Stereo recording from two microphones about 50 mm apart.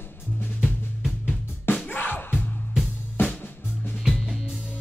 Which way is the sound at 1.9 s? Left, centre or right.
Left.